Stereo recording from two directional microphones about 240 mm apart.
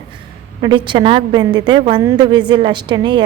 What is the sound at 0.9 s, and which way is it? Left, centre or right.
A woman's voice, centre.